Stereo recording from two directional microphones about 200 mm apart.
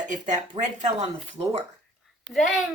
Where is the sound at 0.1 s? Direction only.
35° right (ahead or behind).